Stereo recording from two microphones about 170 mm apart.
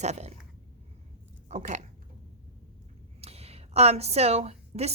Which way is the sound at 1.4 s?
45° right (ahead or behind).